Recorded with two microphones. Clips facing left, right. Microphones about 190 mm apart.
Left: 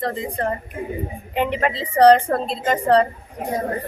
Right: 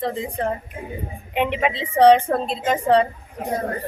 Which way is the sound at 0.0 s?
Centre (ahead or behind).